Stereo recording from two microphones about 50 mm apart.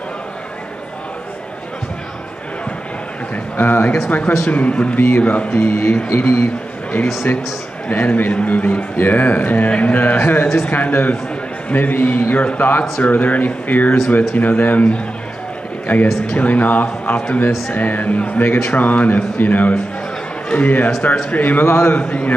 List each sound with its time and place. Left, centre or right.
3.5 s speech: left
4.9 s a man's voice: left
5.2 s speech: left
5.7 s a man's voice: left
7.9 s speech: left
17.5 s speech: centre
17.7 s speech: left